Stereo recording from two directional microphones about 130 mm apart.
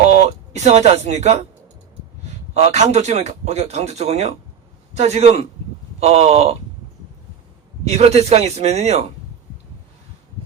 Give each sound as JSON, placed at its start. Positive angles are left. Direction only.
{"t": 0.1, "sound": "speech", "side_deg": -60}
{"t": 2.6, "sound": "speech", "side_deg": -55}
{"t": 7.9, "sound": "speech", "side_deg": -55}